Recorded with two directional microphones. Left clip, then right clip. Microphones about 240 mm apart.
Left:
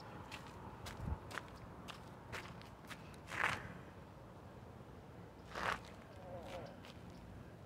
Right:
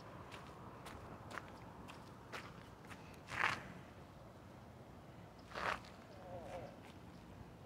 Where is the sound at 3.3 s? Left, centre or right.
Centre.